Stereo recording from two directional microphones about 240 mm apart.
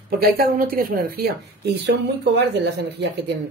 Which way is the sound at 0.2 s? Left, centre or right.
Right.